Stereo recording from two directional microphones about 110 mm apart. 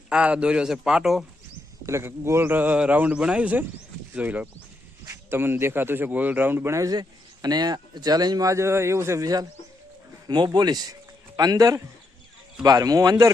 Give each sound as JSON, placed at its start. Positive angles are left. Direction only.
{"t": 0.1, "sound": "speech", "side_deg": -10}
{"t": 1.9, "sound": "speech", "side_deg": -25}